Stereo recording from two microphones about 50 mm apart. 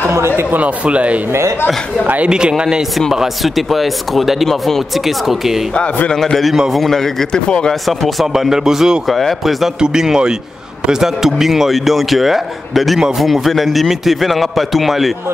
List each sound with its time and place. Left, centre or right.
0.1 s a sound: right
0.8 s speech: right
2.2 s speech: centre
3.1 s a man's voice: centre
5.0 s a man's voice: centre
6.0 s speech: centre
8.3 s speech: centre
9.1 s a man's voice: centre
9.8 s a man's voice: centre